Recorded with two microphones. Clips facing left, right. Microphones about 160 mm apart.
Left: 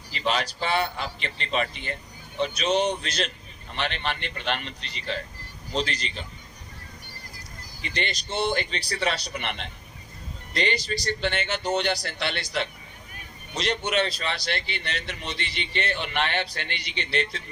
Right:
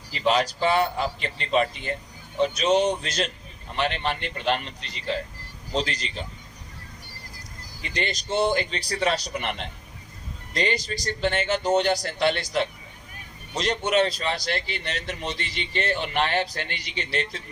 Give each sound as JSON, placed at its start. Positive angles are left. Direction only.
{"t": 0.1, "sound": "a man's voice", "side_deg": -40}
{"t": 7.8, "sound": "a man's voice", "side_deg": -40}